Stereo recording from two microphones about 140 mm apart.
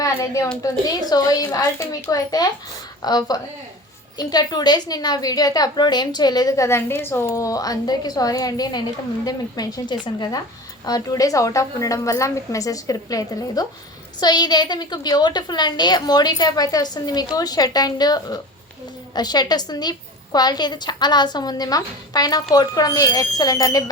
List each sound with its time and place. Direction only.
0.0 s a woman's voice: 25° left (ahead or behind)